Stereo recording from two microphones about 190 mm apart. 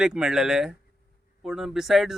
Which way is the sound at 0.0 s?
5° right (ahead or behind).